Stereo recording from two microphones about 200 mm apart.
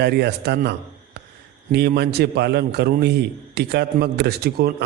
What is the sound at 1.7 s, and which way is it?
A man's voice, 55° right (ahead or behind).